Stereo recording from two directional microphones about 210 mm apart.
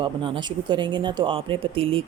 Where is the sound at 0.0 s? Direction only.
25° right (ahead or behind).